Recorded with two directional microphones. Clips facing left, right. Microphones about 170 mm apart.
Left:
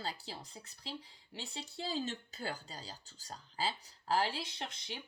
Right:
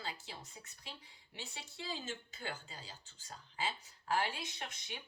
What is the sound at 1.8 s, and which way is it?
Speech, 35° left (ahead or behind).